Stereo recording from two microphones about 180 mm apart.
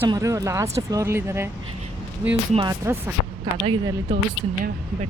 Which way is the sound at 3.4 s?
30° right (ahead or behind).